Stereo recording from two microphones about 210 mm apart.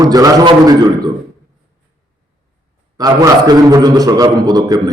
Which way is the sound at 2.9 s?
20° right (ahead or behind).